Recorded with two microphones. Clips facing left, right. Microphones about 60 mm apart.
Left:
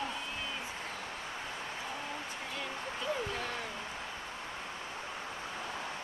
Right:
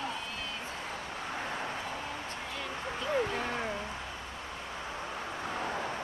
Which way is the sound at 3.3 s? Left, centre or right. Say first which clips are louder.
Right 4 dB; centre.